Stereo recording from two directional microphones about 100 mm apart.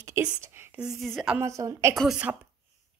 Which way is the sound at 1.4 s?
30° right (ahead or behind).